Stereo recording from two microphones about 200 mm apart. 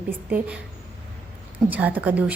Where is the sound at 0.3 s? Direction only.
10° right (ahead or behind).